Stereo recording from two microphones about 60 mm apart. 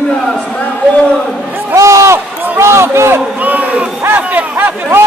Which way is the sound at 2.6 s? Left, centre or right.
Right.